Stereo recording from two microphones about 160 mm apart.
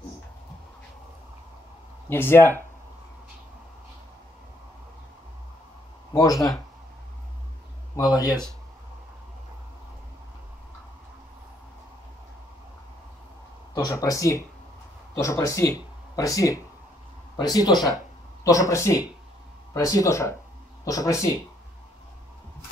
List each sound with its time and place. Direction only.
2.0 s speech: 15° left (ahead or behind)
6.1 s speech: 20° left (ahead or behind)
7.9 s speech: 25° left (ahead or behind)
13.7 s speech: 25° left (ahead or behind)